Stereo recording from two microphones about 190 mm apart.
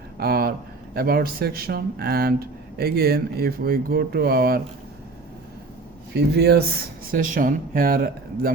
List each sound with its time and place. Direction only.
0.2 s a sound: 55° right (ahead or behind)
0.9 s speech: 55° right (ahead or behind)
6.1 s speech: 60° right (ahead or behind)
7.1 s speech: 45° right (ahead or behind)